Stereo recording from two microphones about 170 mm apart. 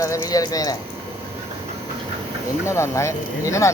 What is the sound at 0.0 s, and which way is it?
Speech, 20° left (ahead or behind).